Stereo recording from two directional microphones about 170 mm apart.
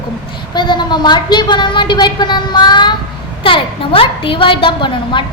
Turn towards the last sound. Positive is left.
turn(degrees=30)  # may be behind; listen again after turning